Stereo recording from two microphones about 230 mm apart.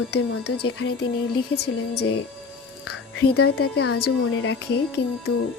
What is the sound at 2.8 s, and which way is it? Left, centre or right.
Music, left.